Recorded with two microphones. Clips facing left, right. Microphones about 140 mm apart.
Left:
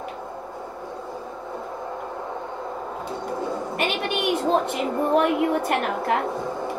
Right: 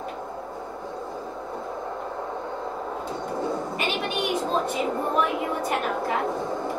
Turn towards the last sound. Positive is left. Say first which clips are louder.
# left 2 dB
turn(degrees=65)  # may be behind; listen again after turning